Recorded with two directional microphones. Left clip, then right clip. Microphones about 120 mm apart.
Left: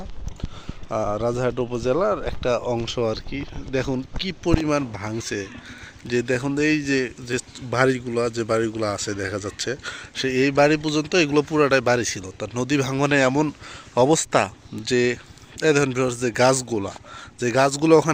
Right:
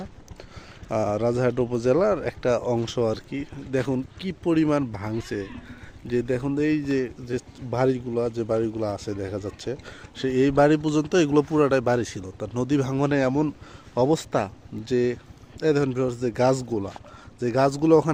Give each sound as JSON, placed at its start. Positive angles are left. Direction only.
{"t": 0.9, "sound": "a man's voice", "side_deg": -40}
{"t": 6.1, "sound": "speech", "side_deg": -5}
{"t": 10.2, "sound": "a man's voice", "side_deg": -20}
{"t": 10.5, "sound": "a man's voice", "side_deg": -35}
{"t": 13.1, "sound": "speech", "side_deg": -5}